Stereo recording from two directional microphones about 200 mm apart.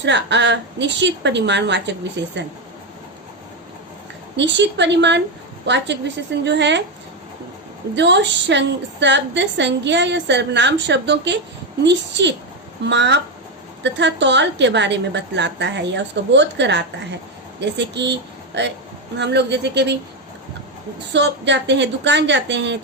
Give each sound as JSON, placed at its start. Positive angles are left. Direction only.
{"t": 0.0, "sound": "a woman's voice", "side_deg": -60}
{"t": 4.4, "sound": "a woman's voice", "side_deg": -60}
{"t": 7.9, "sound": "a woman's voice", "side_deg": -60}
{"t": 21.1, "sound": "a woman's voice", "side_deg": -60}